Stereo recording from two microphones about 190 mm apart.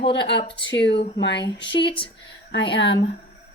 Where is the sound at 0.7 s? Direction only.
65° left (ahead or behind).